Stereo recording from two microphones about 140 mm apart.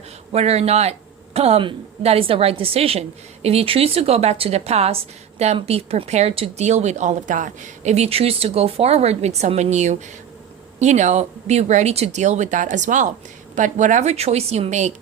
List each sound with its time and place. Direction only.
0.3 s speech: 50° right (ahead or behind)